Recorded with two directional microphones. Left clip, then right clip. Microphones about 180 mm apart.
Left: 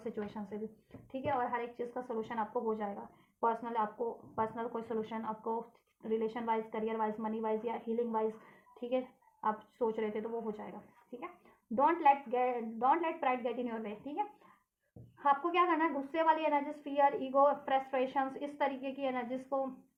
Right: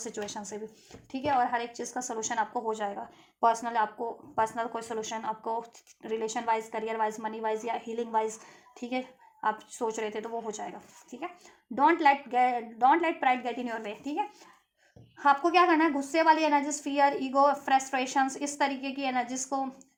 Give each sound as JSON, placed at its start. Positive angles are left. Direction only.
{"t": 0.2, "sound": "a woman's voice", "side_deg": -45}